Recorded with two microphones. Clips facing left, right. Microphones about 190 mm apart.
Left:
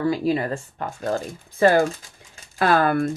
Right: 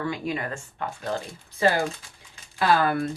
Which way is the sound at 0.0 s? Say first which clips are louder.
Left 7 dB; 35° left (ahead or behind).